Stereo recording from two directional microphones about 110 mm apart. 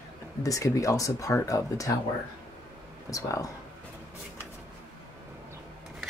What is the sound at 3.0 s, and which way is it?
Speech, 30° left (ahead or behind).